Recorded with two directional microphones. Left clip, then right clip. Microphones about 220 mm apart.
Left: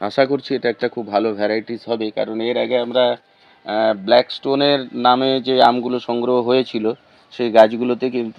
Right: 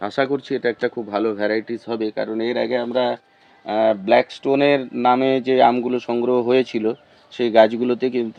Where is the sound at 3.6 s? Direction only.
20° left (ahead or behind).